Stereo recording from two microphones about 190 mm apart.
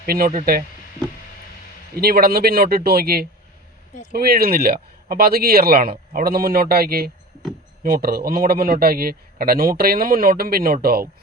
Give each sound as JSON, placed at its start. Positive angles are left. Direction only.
{"t": 0.0, "sound": "a man's voice", "side_deg": -50}
{"t": 2.0, "sound": "a man's voice", "side_deg": -55}